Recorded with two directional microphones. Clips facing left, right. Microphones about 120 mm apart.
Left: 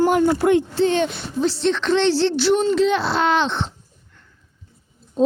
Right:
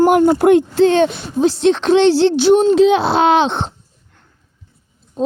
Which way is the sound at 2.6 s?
70° right (ahead or behind).